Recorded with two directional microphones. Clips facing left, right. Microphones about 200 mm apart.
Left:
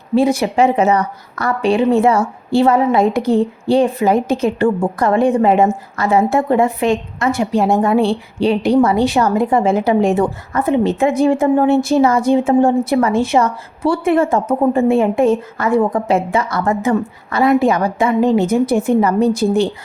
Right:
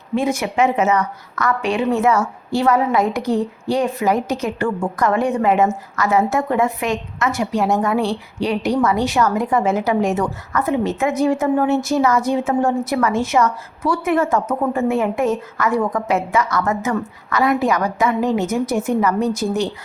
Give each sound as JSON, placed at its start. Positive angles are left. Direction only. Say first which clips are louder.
{"t": 0.1, "sound": "a woman's voice", "louder": "left 6 dB", "side_deg": 35}